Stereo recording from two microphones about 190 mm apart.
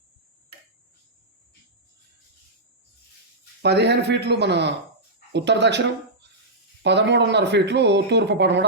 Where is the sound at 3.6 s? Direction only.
60° right (ahead or behind).